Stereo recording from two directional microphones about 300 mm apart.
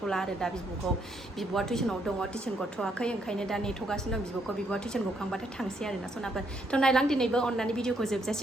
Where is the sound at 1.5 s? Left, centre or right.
Centre.